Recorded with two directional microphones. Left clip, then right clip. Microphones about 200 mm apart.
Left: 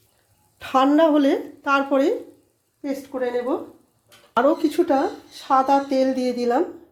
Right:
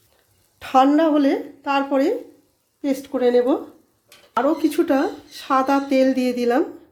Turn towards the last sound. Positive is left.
turn(degrees=-20)  # may be behind; listen again after turning